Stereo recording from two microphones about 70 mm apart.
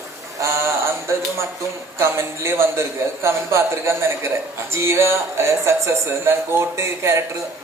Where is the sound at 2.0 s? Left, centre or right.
Right.